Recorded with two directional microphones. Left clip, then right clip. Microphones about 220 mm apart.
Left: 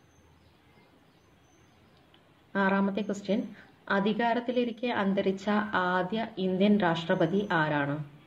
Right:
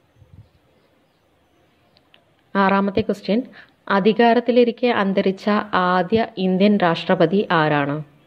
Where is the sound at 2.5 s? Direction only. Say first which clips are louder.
Right 10 dB; 35° right (ahead or behind).